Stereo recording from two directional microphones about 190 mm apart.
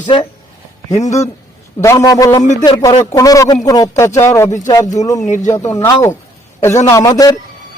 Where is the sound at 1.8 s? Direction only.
15° left (ahead or behind).